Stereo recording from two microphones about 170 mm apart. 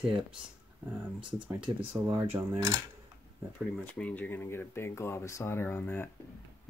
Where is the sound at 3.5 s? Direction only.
5° left (ahead or behind).